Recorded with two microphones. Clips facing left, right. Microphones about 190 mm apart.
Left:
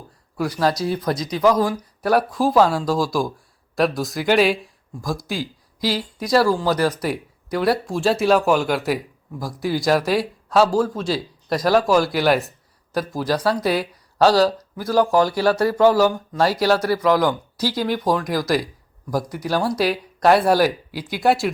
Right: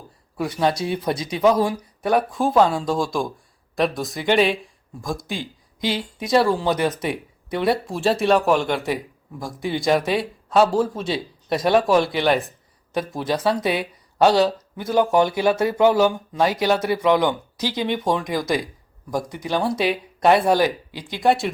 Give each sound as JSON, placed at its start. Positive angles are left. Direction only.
{"t": 0.7, "sound": "speech", "side_deg": -25}
{"t": 1.7, "sound": "speech", "side_deg": 0}
{"t": 6.7, "sound": "speech", "side_deg": -20}
{"t": 7.0, "sound": "speech", "side_deg": 0}
{"t": 14.8, "sound": "speech", "side_deg": -20}
{"t": 17.0, "sound": "speech", "side_deg": 0}
{"t": 17.2, "sound": "speech", "side_deg": -20}
{"t": 17.7, "sound": "speech", "side_deg": 5}